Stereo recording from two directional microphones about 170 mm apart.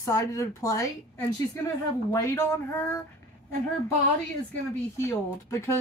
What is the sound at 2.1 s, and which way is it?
Speech, 15° left (ahead or behind).